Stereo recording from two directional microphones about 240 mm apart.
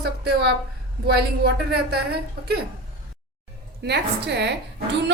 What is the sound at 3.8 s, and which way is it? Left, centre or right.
Speech, right.